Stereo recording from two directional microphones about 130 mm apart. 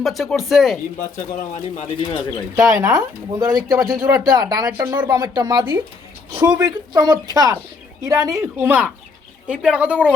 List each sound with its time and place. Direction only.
0.0 s speech: centre (ahead or behind)
1.1 s speech: 60° left (ahead or behind)
2.0 s speech: 40° left (ahead or behind)
2.6 s a woman's voice: 25° right (ahead or behind)